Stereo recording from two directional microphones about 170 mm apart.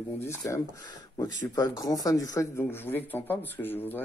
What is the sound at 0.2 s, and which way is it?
Speech, 15° left (ahead or behind).